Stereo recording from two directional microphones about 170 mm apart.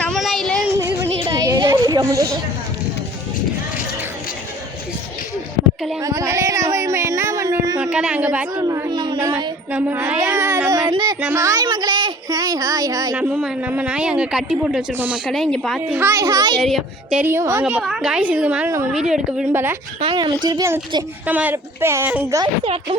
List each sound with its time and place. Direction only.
0.1 s child singing: centre (ahead or behind)
0.8 s a sound: 15° right (ahead or behind)
6.0 s a sound: 20° right (ahead or behind)
7.8 s a woman's voice: 5° right (ahead or behind)
8.5 s a sound: 20° right (ahead or behind)
9.1 s child singing: 10° right (ahead or behind)
9.7 s a woman's voice: 10° right (ahead or behind)
10.2 s a sound: 15° right (ahead or behind)
11.2 s speech: 15° right (ahead or behind)
13.1 s speech: 5° right (ahead or behind)
15.9 s a woman's voice: 15° right (ahead or behind)
16.6 s a woman's voice: centre (ahead or behind)
20.0 s a woman's voice: 30° right (ahead or behind)
22.6 s speech: 35° right (ahead or behind)